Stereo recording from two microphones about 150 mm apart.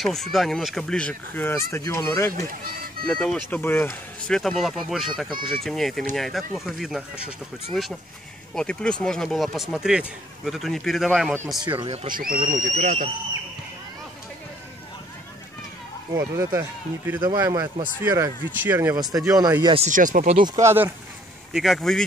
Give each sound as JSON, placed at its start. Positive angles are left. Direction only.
{"t": 0.0, "sound": "speech", "side_deg": 0}
{"t": 2.6, "sound": "a sound", "side_deg": -75}
{"t": 3.1, "sound": "speech", "side_deg": 5}
{"t": 4.3, "sound": "speech", "side_deg": 0}
{"t": 8.5, "sound": "speech", "side_deg": 5}
{"t": 11.6, "sound": "speech", "side_deg": -30}
{"t": 12.1, "sound": "speech", "side_deg": -70}
{"t": 16.2, "sound": "speech", "side_deg": -20}
{"t": 18.9, "sound": "speech", "side_deg": -25}
{"t": 19.6, "sound": "speech", "side_deg": -40}
{"t": 19.9, "sound": "speech", "side_deg": -60}
{"t": 20.3, "sound": "speech", "side_deg": -25}
{"t": 21.5, "sound": "speech", "side_deg": 0}